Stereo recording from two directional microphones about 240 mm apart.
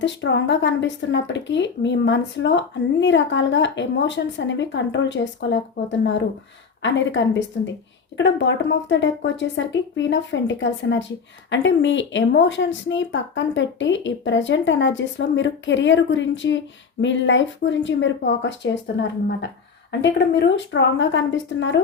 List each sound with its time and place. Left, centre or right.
0.0 s a woman's voice: left